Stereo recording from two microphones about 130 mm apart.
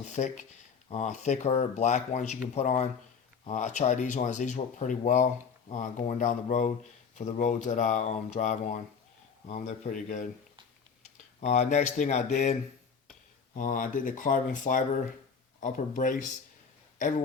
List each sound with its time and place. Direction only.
0.0 s speech: 65° left (ahead or behind)
9.5 s speech: 60° left (ahead or behind)
11.3 s speech: 60° left (ahead or behind)
13.5 s speech: 90° left; by 16.4 s 70° left (ahead or behind)